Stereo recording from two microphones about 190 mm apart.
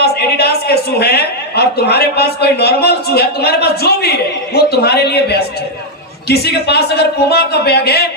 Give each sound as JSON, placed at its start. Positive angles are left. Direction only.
{"t": 0.0, "sound": "a man's voice", "side_deg": 55}